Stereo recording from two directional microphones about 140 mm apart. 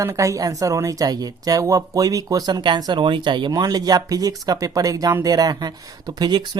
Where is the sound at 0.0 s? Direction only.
25° right (ahead or behind).